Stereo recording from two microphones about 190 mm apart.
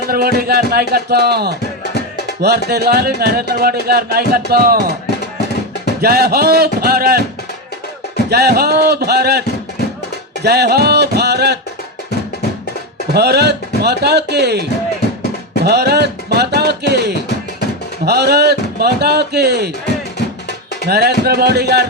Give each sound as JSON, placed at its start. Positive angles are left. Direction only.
{"t": 0.1, "sound": "speech", "side_deg": -55}
{"t": 2.6, "sound": "speech", "side_deg": -55}
{"t": 6.0, "sound": "speech", "side_deg": -55}
{"t": 8.3, "sound": "speech", "side_deg": -55}
{"t": 10.4, "sound": "speech", "side_deg": -60}
{"t": 13.1, "sound": "speech", "side_deg": -60}
{"t": 20.8, "sound": "speech", "side_deg": -60}